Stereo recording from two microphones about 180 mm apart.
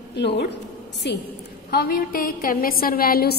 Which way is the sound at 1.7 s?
60° left (ahead or behind).